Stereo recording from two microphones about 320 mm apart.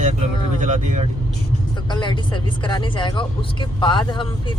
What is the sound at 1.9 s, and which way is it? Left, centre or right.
Speech, centre.